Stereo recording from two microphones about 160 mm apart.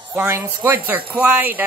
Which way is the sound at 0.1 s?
10° right (ahead or behind).